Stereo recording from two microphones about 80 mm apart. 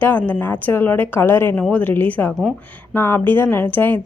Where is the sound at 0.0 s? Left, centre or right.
Left.